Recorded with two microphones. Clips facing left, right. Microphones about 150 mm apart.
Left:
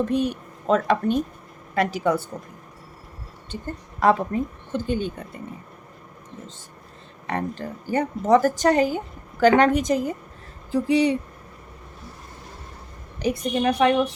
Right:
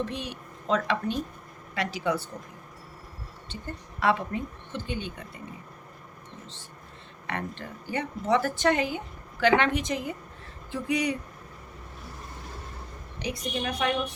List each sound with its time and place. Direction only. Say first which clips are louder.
0.0 s a woman's voice: left 10 dB; 45° left (ahead or behind)
3.5 s a woman's voice: left 6 dB; 45° left (ahead or behind)
7.3 s speech: left 7 dB; 35° left (ahead or behind)
13.1 s a woman's voice: left 8 dB; 45° left (ahead or behind)
13.7 s a woman's voice: left 10 dB; 85° left